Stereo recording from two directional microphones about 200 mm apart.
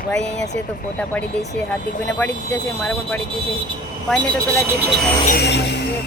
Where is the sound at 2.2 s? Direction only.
5° left (ahead or behind).